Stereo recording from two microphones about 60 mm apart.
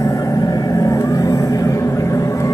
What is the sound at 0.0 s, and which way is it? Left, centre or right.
Vehicle, left.